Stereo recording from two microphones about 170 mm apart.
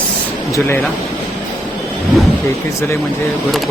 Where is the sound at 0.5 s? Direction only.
15° left (ahead or behind).